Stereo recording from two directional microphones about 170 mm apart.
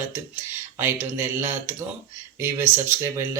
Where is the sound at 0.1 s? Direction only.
15° right (ahead or behind).